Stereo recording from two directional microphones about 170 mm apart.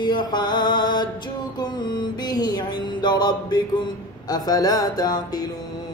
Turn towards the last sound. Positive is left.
turn(degrees=25)  # may be behind; listen again after turning